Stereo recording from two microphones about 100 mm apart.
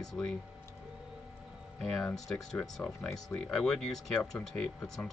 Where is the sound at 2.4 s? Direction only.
5° left (ahead or behind).